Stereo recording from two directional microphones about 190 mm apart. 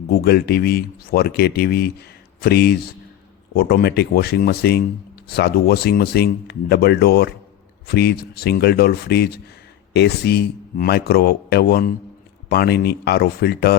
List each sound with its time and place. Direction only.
0.1 s speech: 55° left (ahead or behind)